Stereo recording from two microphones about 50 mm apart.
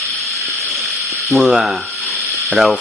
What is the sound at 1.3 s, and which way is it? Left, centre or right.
Speech, centre.